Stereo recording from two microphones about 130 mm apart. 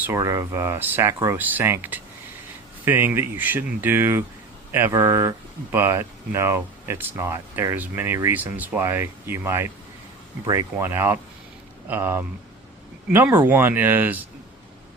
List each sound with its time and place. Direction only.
0.0 s speech: 20° right (ahead or behind)
4.9 s speech: 25° right (ahead or behind)
10.8 s speech: 15° right (ahead or behind)